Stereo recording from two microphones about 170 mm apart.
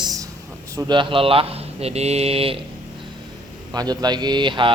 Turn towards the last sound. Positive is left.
turn(degrees=-30)  # may be behind; listen again after turning